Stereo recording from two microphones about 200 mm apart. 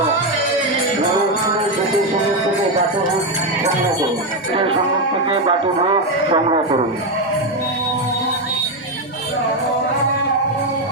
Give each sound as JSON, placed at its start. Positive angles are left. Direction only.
{"t": 6.3, "sound": "speech", "side_deg": -25}